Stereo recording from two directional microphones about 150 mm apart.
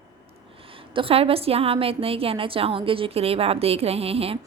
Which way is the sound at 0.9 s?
40° right (ahead or behind).